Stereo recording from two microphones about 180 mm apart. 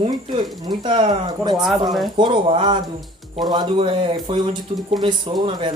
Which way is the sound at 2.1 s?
25° right (ahead or behind).